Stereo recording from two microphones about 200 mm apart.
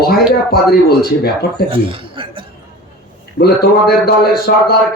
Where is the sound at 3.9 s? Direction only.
50° left (ahead or behind).